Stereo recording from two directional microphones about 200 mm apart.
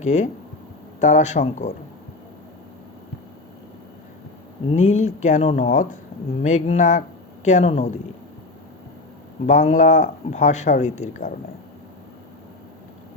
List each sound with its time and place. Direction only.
0.0 s speech: 35° left (ahead or behind)
4.7 s speech: 35° left (ahead or behind)
9.5 s speech: 40° left (ahead or behind)